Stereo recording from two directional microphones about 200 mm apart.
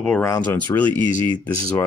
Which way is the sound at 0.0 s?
10° left (ahead or behind).